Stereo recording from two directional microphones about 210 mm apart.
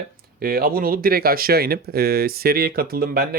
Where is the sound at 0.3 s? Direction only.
45° right (ahead or behind).